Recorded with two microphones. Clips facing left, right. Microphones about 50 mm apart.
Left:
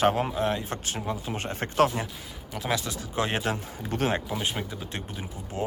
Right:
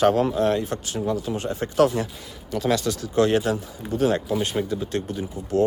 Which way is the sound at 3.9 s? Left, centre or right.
Left.